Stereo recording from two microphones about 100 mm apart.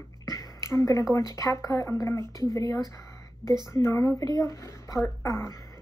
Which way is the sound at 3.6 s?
30° left (ahead or behind).